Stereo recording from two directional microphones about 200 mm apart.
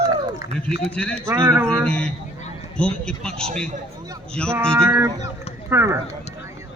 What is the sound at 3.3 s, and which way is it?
Speech, 30° right (ahead or behind).